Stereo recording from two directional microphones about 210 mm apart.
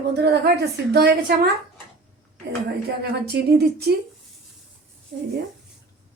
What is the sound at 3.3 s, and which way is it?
Speech, 50° right (ahead or behind).